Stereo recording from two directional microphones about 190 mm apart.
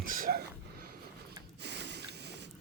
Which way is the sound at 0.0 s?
45° right (ahead or behind).